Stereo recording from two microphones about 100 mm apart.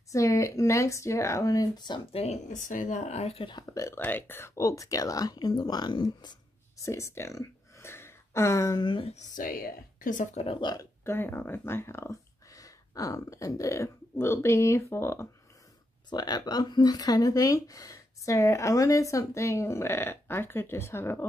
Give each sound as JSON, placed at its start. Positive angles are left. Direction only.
{"t": 0.1, "sound": "speech", "side_deg": 30}
{"t": 2.2, "sound": "speech", "side_deg": 90}
{"t": 3.6, "sound": "speech", "side_deg": 30}
{"t": 6.8, "sound": "speech", "side_deg": 30}
{"t": 8.8, "sound": "speech", "side_deg": 65}
{"t": 10.3, "sound": "speech", "side_deg": 70}
{"t": 10.6, "sound": "speech", "side_deg": 45}
{"t": 11.1, "sound": "speech", "side_deg": 20}
{"t": 16.1, "sound": "speech", "side_deg": 40}